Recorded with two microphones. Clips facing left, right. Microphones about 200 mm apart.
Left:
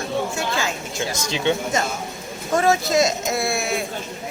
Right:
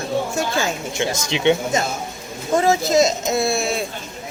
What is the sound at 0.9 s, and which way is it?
Speech, 20° right (ahead or behind).